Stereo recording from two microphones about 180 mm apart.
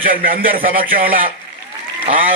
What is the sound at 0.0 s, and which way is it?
A man's voice, 50° right (ahead or behind).